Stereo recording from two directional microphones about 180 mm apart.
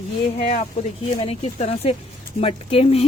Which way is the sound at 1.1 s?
35° left (ahead or behind).